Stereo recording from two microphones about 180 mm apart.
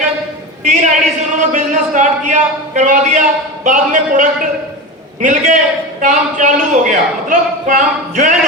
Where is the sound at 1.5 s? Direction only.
45° right (ahead or behind).